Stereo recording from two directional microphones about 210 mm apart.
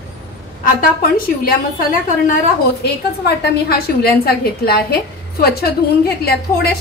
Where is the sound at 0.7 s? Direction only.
40° left (ahead or behind).